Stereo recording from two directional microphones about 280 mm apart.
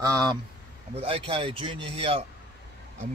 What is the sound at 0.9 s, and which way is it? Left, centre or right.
Speech, centre.